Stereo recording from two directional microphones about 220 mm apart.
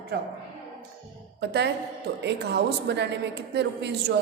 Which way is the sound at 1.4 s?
50° right (ahead or behind).